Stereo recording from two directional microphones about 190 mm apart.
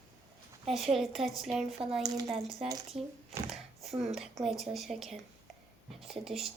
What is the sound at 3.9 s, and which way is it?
Speech, 35° right (ahead or behind).